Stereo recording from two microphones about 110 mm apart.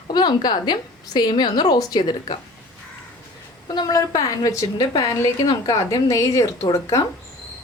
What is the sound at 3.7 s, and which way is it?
A woman's voice, 35° left (ahead or behind).